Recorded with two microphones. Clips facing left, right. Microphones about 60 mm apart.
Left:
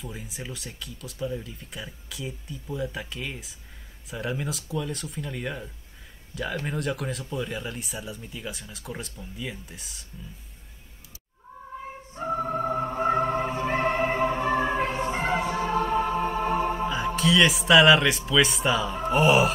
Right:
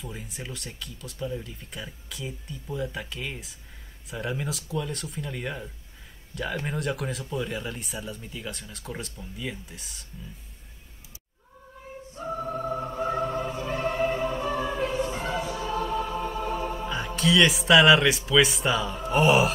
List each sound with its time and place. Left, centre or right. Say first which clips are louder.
0.0 s speech: left 1 dB; centre
12.2 s music: left 4 dB; left
16.8 s speech: left 2 dB; centre